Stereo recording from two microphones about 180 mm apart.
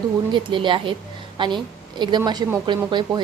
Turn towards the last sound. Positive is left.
turn(degrees=-25)  # may be behind; listen again after turning